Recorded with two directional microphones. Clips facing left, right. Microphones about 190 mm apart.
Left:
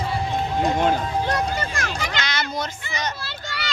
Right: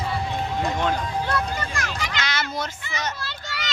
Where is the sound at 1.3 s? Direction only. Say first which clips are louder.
Left 2 dB; 40° left (ahead or behind).